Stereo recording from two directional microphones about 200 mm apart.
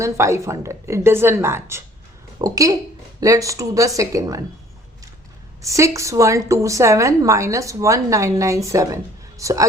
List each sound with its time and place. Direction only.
0.0 s a woman's voice: 15° right (ahead or behind)
5.6 s a woman's voice: 15° right (ahead or behind)